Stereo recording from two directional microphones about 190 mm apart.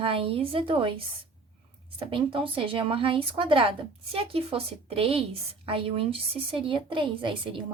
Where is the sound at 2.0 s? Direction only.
25° right (ahead or behind).